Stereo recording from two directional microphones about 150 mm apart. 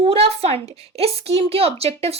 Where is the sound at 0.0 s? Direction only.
40° right (ahead or behind).